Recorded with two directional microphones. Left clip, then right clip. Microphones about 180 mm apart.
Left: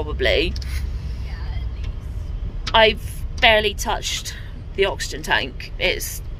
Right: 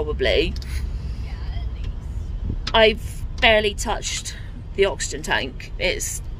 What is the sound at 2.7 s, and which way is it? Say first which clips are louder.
A woman's voice: left 1 dB; 10° right (ahead or behind).